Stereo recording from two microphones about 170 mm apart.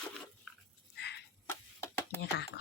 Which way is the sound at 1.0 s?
85° left.